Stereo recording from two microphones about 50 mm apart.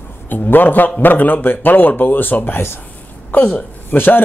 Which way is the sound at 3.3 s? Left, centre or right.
Left.